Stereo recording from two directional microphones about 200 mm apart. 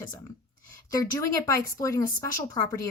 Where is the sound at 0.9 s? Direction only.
15° left (ahead or behind).